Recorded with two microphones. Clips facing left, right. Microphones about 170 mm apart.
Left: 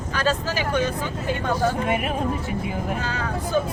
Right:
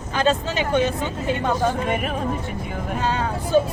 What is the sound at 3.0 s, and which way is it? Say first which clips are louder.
Speech: right 4 dB; 25° right (ahead or behind).